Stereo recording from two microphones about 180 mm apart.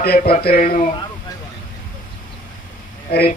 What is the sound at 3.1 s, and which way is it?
Speech, 60° left (ahead or behind).